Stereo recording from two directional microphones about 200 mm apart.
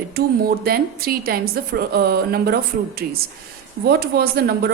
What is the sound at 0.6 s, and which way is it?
A woman's voice, 50° right (ahead or behind).